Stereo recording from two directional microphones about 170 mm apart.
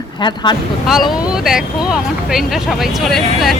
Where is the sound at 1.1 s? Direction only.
5° right (ahead or behind).